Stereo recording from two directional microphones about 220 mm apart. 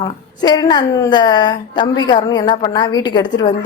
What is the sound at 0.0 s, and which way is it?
A woman's voice, 15° left (ahead or behind).